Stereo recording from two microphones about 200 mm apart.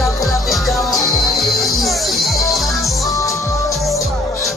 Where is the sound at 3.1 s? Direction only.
15° left (ahead or behind).